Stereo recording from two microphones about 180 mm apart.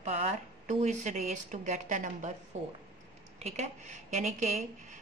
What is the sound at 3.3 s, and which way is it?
Speech, 40° right (ahead or behind).